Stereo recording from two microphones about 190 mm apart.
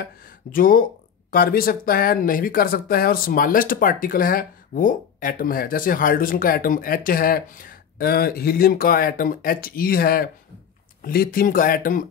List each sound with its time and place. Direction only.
0.0 s speech: 45° left (ahead or behind)